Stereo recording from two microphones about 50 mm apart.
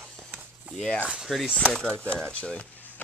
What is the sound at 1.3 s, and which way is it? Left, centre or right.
Speech, centre.